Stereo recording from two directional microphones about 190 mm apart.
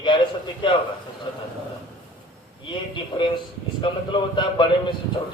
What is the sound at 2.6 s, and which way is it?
A man's voice, 25° left (ahead or behind).